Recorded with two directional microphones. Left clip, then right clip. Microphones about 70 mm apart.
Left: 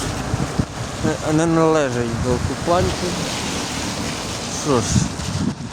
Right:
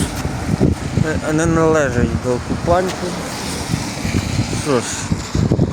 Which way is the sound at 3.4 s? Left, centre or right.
Right.